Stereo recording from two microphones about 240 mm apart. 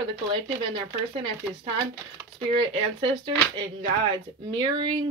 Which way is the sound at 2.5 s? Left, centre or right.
Right.